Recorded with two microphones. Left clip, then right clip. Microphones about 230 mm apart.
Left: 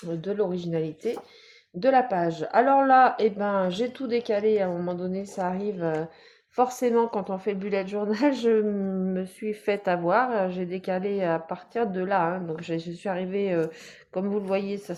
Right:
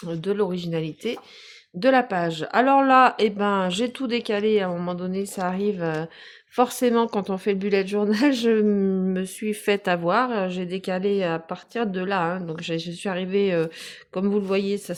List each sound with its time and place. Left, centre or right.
0.1 s a woman's voice: right